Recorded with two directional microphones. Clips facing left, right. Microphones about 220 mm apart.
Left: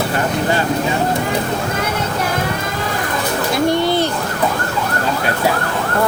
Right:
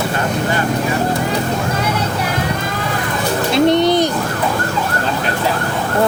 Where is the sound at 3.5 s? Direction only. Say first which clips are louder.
Right 4 dB; 20° right (ahead or behind).